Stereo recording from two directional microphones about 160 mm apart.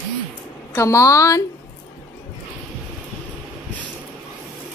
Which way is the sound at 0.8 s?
20° left (ahead or behind).